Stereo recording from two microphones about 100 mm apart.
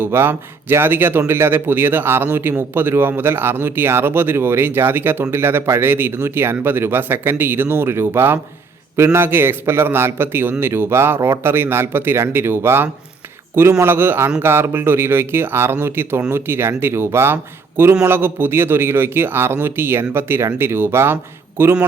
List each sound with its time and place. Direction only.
0.0 s speech: 25° right (ahead or behind)